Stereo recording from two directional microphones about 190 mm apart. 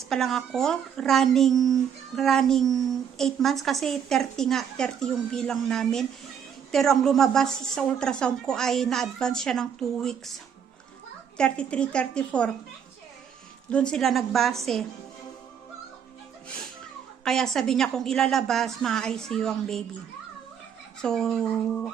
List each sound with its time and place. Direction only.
0.0 s a woman's voice: centre (ahead or behind)
11.3 s a woman's voice: 5° left (ahead or behind)
13.7 s a woman's voice: 5° left (ahead or behind)
17.2 s a woman's voice: 5° left (ahead or behind)
21.0 s a woman's voice: 5° left (ahead or behind)